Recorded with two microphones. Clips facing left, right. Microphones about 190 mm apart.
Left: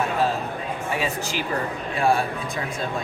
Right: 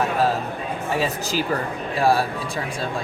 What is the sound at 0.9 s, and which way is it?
Speech, 40° right (ahead or behind).